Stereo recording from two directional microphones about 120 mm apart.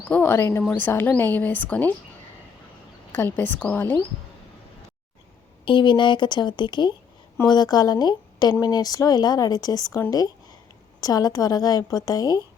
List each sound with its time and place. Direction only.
0.1 s speech: 20° left (ahead or behind)
3.3 s speech: 15° left (ahead or behind)
5.6 s a woman's voice: 40° left (ahead or behind)